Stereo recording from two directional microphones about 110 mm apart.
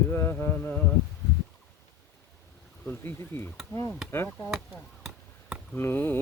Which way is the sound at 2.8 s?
20° left (ahead or behind).